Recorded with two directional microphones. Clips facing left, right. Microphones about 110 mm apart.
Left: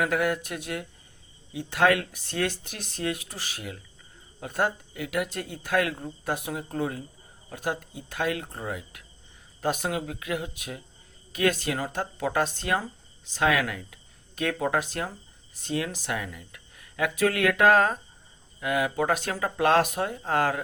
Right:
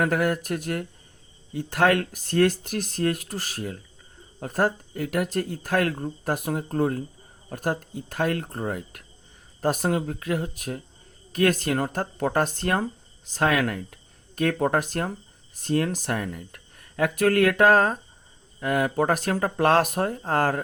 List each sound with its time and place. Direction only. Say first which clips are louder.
0.0 s speech: right 2 dB; 45° right (ahead or behind)